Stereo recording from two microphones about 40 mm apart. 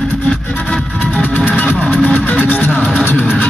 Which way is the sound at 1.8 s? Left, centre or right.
Right.